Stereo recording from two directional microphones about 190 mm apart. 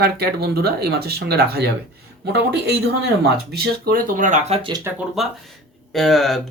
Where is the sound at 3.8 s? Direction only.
50° right (ahead or behind).